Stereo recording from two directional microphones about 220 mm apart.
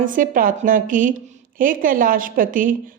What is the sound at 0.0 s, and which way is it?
A woman's voice, 35° right (ahead or behind).